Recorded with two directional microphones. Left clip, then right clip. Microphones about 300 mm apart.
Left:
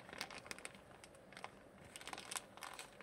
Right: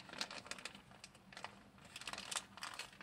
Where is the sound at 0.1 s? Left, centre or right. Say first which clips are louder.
Right 3 dB; left.